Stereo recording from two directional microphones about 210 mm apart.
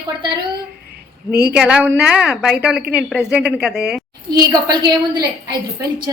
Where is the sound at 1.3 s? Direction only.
50° right (ahead or behind).